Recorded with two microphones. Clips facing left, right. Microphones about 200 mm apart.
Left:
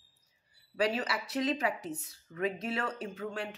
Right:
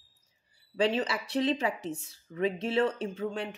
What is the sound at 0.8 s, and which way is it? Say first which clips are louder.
A woman's voice: right 3 dB; 25° right (ahead or behind).